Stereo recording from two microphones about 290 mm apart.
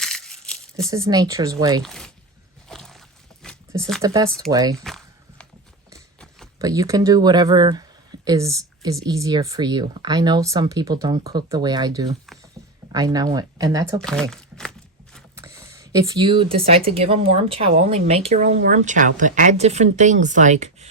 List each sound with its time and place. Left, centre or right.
0.0 s crumpling: centre
0.9 s speech: centre
1.8 s speech: centre
2.6 s a sound: centre
4.0 s speech: centre
4.8 s walk: centre
6.6 s speech: centre
12.6 s a sound: centre
12.9 s speech: centre
14.0 s a sound: centre
15.4 s speech: centre